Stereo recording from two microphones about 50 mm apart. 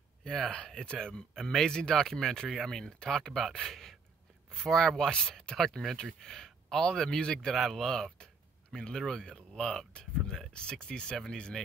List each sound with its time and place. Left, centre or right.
0.2 s speech: centre